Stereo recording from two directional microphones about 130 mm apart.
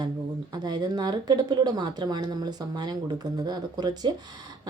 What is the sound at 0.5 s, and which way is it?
A woman's voice, 35° right (ahead or behind).